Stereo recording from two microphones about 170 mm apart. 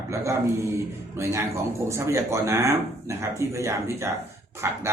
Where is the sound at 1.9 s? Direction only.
15° right (ahead or behind).